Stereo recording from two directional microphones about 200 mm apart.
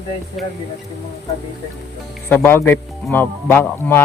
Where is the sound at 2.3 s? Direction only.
10° left (ahead or behind).